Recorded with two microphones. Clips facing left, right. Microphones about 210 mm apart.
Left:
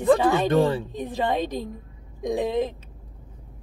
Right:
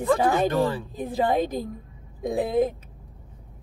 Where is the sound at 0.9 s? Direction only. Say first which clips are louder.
Right 2 dB; 5° right (ahead or behind).